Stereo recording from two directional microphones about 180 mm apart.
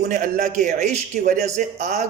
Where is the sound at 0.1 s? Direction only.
45° right (ahead or behind).